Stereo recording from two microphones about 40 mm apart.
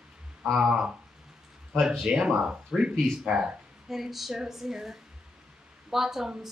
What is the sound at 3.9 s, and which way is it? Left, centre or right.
A woman's voice, centre.